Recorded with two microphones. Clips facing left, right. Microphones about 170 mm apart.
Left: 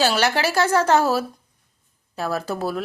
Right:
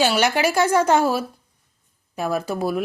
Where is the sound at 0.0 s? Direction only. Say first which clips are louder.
Right 1 dB; 10° right (ahead or behind).